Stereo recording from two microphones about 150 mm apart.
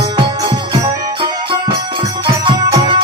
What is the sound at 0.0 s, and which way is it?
Music, 25° right (ahead or behind).